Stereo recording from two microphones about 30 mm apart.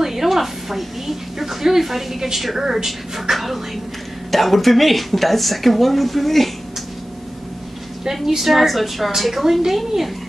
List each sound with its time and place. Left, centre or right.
0.0 s a woman's voice: centre
8.5 s a woman's voice: centre